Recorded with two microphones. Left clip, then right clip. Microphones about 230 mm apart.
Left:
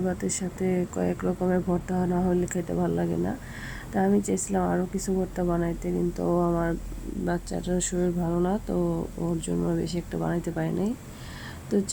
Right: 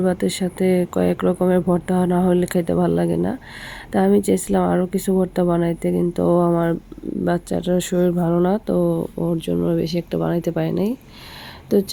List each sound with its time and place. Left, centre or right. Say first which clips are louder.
0.0 s speech: right 9 dB; right